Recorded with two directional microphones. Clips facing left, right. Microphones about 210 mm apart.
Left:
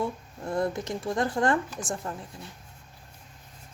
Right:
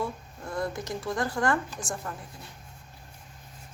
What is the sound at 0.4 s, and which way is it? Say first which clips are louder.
Speech: left 4 dB; 25° left (ahead or behind).